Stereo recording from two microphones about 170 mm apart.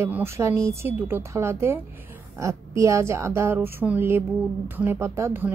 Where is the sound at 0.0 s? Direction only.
15° right (ahead or behind).